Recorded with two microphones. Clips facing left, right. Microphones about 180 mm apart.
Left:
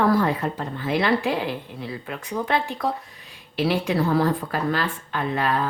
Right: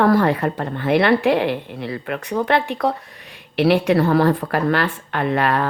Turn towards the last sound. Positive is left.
turn(degrees=-70)  # may be behind; listen again after turning